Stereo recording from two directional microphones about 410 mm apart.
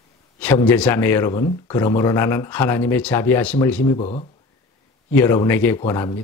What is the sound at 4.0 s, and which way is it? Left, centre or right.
Speech, centre.